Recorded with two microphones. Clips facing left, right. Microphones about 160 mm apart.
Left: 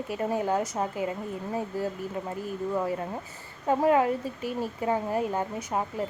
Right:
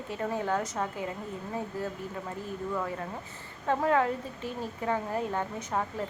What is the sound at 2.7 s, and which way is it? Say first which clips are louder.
A woman's voice: left 5 dB; 25° left (ahead or behind).